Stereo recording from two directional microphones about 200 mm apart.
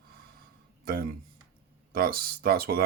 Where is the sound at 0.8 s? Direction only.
50° right (ahead or behind).